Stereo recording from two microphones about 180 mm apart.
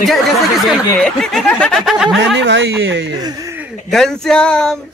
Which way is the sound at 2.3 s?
90° right.